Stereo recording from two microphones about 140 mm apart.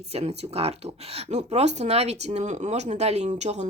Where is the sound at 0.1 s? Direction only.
45° right (ahead or behind).